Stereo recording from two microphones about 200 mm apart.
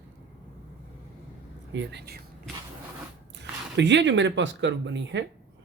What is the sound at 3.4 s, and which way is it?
Speech, 60° right (ahead or behind).